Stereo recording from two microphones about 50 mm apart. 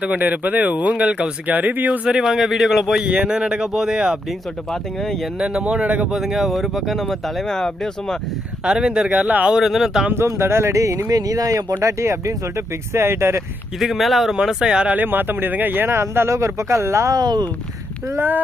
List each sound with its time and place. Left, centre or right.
0.0 s speech: right
2.0 s speech: centre
4.7 s speech: centre
5.6 s speech: right
6.1 s speech: centre
8.6 s speech: centre
9.1 s speech: right
9.5 s speech: centre
10.2 s speech: right
13.7 s speech: centre
14.6 s speech: centre
14.9 s speech: right
16.0 s speech: right
18.1 s speech: right